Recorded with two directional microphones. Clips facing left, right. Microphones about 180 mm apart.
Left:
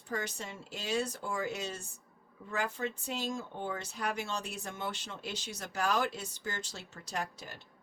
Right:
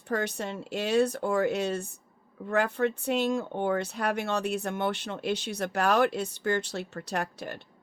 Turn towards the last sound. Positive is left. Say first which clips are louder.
# right 7 dB
turn(degrees=-60)  # may be behind; listen again after turning